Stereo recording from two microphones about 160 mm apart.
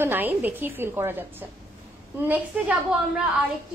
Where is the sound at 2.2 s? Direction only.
10° right (ahead or behind).